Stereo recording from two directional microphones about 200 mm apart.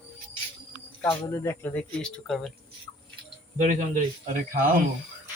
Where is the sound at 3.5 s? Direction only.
40° right (ahead or behind).